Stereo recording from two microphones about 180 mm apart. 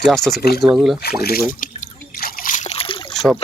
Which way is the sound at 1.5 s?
45° left (ahead or behind).